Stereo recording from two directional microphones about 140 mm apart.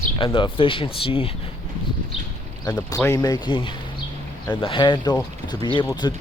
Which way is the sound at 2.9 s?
25° left (ahead or behind).